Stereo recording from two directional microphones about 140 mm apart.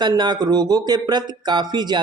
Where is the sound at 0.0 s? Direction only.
30° right (ahead or behind).